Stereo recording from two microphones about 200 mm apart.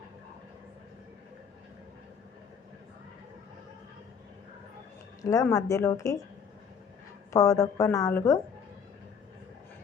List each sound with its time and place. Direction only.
5.2 s a woman's voice: 15° left (ahead or behind)
7.3 s a woman's voice: 15° left (ahead or behind)